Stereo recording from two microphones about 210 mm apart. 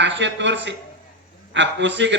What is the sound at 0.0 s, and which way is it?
A man's voice, 60° right (ahead or behind).